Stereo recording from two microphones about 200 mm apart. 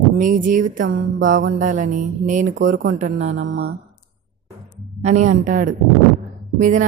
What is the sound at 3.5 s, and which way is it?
Speech, 55° right (ahead or behind).